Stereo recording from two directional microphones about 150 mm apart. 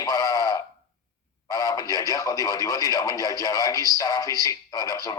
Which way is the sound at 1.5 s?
25° left (ahead or behind).